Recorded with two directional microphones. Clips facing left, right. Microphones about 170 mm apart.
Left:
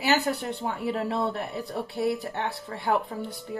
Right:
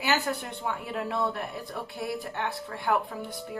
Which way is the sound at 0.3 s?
30° left (ahead or behind).